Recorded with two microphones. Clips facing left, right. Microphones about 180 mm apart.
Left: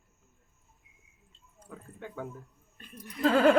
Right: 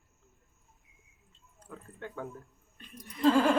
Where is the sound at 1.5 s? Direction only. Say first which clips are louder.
Even; 10° left (ahead or behind).